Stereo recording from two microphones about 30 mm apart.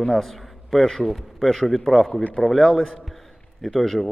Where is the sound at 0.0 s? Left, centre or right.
Centre.